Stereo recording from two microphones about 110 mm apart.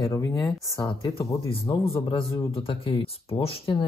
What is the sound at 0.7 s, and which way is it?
Speech, 45° left (ahead or behind).